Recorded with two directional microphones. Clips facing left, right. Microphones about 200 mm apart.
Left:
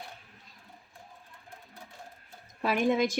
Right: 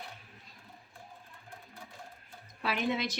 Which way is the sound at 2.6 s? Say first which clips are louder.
Left 6 dB; 45° left (ahead or behind).